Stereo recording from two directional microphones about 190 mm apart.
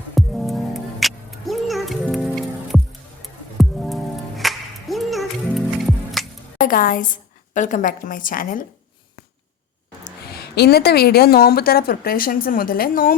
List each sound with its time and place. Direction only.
0.1 s music: centre (ahead or behind)
6.6 s a woman's voice: 45° left (ahead or behind)
10.2 s a woman's voice: 60° left (ahead or behind)